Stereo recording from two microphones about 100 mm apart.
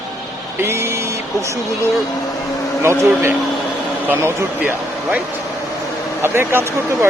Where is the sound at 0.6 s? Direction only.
25° right (ahead or behind).